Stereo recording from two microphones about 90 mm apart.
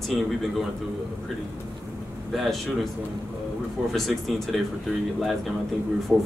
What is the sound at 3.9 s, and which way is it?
Speech, centre (ahead or behind).